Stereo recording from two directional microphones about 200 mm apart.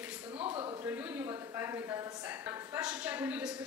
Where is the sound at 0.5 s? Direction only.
25° right (ahead or behind).